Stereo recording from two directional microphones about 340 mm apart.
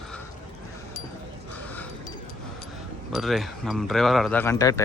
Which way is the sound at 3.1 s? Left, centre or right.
Centre.